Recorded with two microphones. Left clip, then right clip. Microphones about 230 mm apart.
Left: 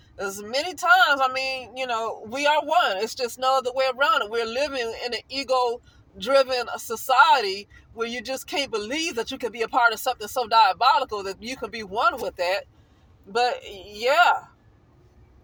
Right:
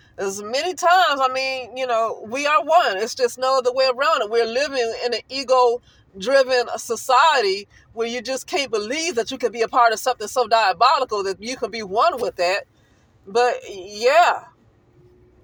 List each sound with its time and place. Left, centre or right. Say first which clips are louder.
0.2 s speech: right 4 dB; right